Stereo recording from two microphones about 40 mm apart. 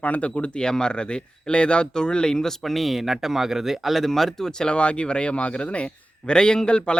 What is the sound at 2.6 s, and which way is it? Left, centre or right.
Speech, centre.